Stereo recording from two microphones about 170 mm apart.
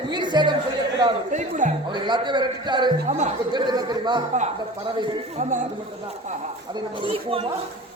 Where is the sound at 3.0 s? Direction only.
45° right (ahead or behind).